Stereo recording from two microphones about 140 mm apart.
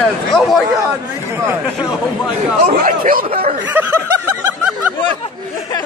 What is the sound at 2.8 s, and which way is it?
Speech, 75° right (ahead or behind).